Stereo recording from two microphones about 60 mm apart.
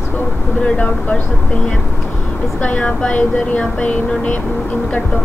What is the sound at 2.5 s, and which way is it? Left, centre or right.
Speech, left.